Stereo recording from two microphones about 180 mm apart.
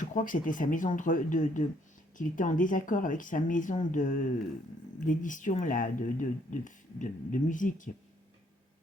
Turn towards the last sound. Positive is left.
turn(degrees=45)  # may be behind; listen again after turning